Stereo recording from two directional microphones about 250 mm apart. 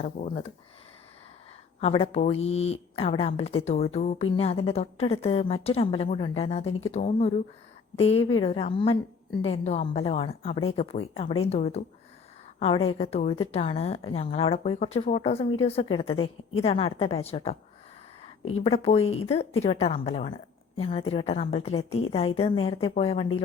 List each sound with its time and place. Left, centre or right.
0.0 s speech: left
1.8 s speech: left